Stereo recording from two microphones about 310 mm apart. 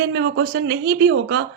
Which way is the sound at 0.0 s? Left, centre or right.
Right.